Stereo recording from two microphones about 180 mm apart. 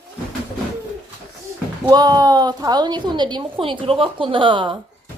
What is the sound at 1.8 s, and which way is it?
A woman's voice, 20° right (ahead or behind).